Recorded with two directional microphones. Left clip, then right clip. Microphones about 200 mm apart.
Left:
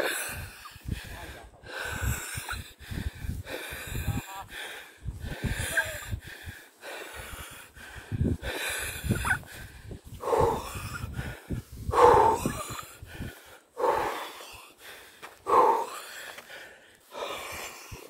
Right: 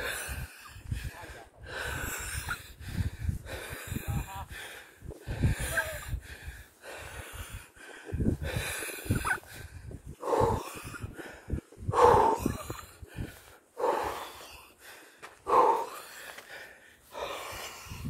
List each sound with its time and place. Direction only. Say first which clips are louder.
0.0 s a sound: left 5 dB; 25° left (ahead or behind)
1.7 s snort: left 1 dB; 5° left (ahead or behind)
6.8 s snort: left 3 dB; 35° left (ahead or behind); by 9.6 s 10° left (ahead or behind)
10.2 s snort: left 2 dB; 25° left (ahead or behind)
17.1 s a sound: left 2 dB; 10° left (ahead or behind)
17.7 s vehicle: left 1 dB; 10° right (ahead or behind)